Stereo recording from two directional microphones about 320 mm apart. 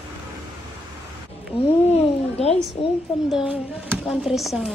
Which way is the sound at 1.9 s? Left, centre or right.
Centre.